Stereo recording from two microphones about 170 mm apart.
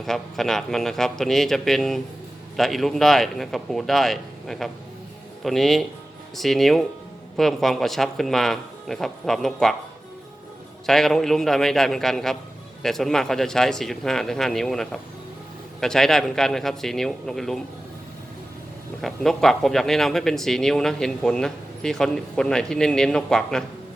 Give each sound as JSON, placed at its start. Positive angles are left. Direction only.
{"t": 0.0, "sound": "speech", "side_deg": 0}
{"t": 10.8, "sound": "speech", "side_deg": 0}
{"t": 19.0, "sound": "speech", "side_deg": 0}